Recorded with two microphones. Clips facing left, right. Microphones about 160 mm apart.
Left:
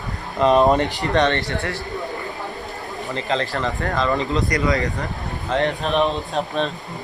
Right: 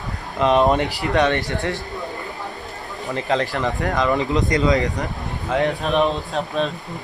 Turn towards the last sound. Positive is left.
turn(degrees=-5)  # may be behind; listen again after turning